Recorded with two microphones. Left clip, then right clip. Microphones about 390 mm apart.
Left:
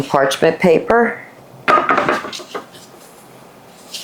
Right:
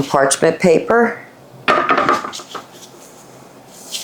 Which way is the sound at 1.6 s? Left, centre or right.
Left.